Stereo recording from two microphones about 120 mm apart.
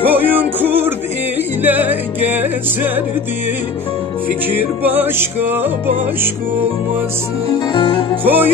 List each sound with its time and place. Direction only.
0.0 s music: 15° right (ahead or behind)
4.5 s music: 15° right (ahead or behind)
7.7 s music: 45° left (ahead or behind)
8.2 s music: 15° right (ahead or behind)